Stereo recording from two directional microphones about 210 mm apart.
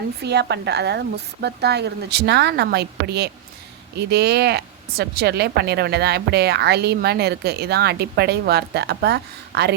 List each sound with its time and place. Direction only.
0.2 s speech: 55° right (ahead or behind)